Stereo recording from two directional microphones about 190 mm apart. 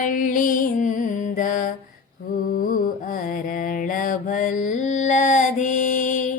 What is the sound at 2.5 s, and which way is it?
Carnatic music, 50° left (ahead or behind).